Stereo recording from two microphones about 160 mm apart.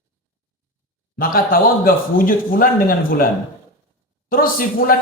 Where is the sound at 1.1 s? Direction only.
65° left (ahead or behind).